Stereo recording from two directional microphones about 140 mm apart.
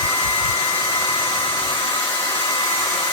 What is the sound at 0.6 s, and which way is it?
Hair dryer, 20° left (ahead or behind).